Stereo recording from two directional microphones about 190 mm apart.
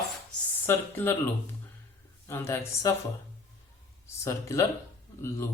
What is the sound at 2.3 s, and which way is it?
Speech, 15° left (ahead or behind).